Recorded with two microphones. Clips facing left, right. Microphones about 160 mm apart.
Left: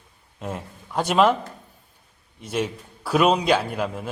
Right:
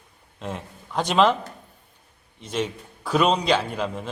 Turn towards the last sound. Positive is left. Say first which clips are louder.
# left 1 dB
turn(degrees=10)  # may be behind; listen again after turning